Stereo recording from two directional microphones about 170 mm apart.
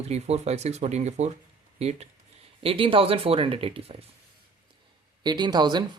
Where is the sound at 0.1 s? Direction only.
40° right (ahead or behind).